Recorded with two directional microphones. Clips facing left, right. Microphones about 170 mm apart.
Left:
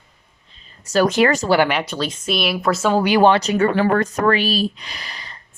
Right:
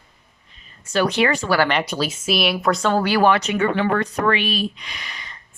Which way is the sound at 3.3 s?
35° left (ahead or behind).